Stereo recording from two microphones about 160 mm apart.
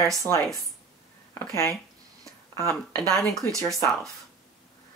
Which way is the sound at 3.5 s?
20° right (ahead or behind).